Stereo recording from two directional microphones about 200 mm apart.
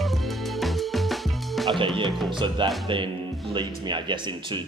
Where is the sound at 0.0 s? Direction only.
Centre (ahead or behind).